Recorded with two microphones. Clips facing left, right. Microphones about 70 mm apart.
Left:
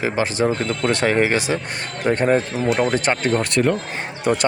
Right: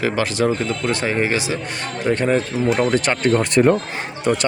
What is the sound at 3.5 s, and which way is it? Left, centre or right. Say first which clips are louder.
Speech: right 6 dB; right.